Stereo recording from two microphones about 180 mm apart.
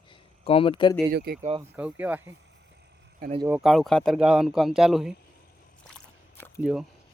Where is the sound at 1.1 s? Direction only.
60° right (ahead or behind).